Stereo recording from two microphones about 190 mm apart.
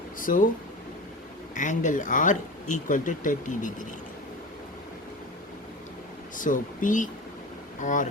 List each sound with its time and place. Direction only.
0.2 s speech: 45° left (ahead or behind)
1.5 s speech: 40° left (ahead or behind)
6.3 s speech: 45° left (ahead or behind)